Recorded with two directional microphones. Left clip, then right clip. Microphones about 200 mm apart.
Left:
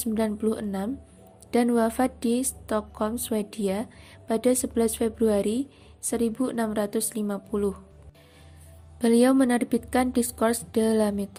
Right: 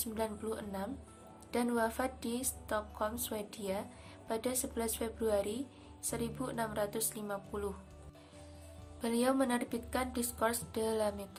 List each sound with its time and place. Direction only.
0.0 s a woman's voice: 35° left (ahead or behind)
9.0 s a woman's voice: 35° left (ahead or behind)